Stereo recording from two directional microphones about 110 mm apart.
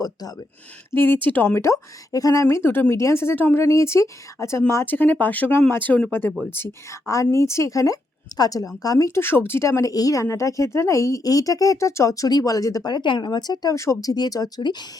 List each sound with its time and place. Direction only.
0.0 s a woman's voice: 35° left (ahead or behind)
0.9 s a woman's voice: 20° left (ahead or behind); by 14.8 s 40° left (ahead or behind)